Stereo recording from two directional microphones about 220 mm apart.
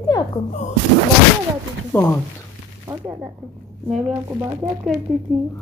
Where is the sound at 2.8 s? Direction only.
15° right (ahead or behind).